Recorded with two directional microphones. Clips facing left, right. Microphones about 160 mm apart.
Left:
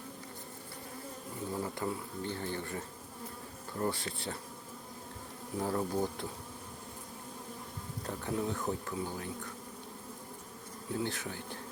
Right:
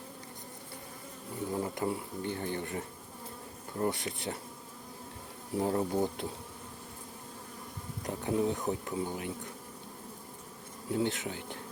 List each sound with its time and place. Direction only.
1.5 s speech: 20° right (ahead or behind)
5.5 s speech: 25° right (ahead or behind)
8.0 s speech: 20° right (ahead or behind)
10.9 s speech: 20° right (ahead or behind)